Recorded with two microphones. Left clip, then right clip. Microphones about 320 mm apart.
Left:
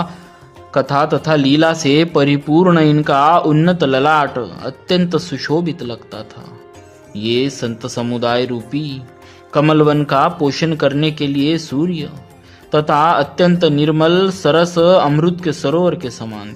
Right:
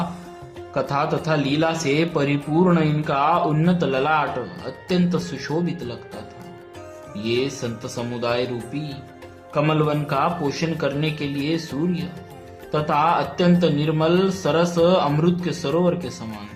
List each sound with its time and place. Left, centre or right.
0.7 s speech: left
7.2 s speech: left